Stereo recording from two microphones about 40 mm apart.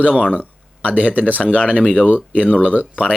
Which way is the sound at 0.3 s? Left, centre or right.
Right.